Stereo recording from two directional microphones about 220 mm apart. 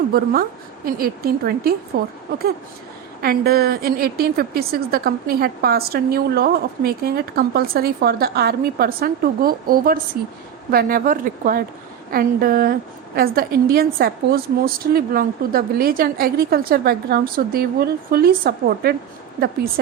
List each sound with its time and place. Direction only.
0.9 s a woman's voice: 40° right (ahead or behind)
3.2 s a woman's voice: 45° right (ahead or behind)